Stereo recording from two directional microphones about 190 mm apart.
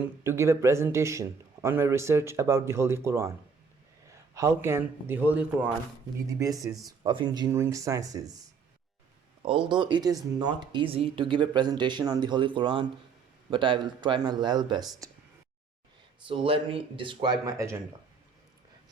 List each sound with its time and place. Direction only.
0.3 s a man's voice: 15° right (ahead or behind)
9.4 s speech: 25° right (ahead or behind)
15.0 s a sound: 15° right (ahead or behind)
16.2 s speech: 25° right (ahead or behind)